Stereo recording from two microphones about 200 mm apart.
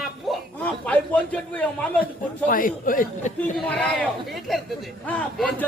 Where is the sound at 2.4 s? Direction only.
45° left (ahead or behind).